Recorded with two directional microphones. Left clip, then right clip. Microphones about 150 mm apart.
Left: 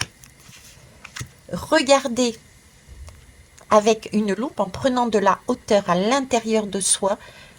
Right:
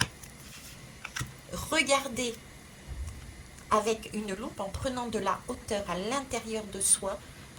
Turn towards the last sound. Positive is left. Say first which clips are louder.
# left 13 dB
turn(degrees=55)  # may be behind; listen again after turning